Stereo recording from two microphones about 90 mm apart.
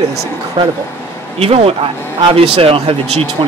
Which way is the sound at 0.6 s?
65° right (ahead or behind).